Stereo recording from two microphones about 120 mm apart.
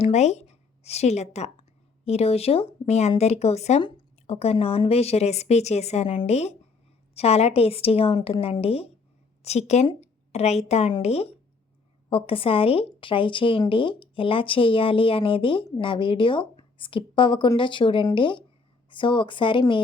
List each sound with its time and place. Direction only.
0.0 s a woman's voice: 70° left (ahead or behind)
9.4 s a woman's voice: 65° left (ahead or behind); by 19.8 s 45° left (ahead or behind)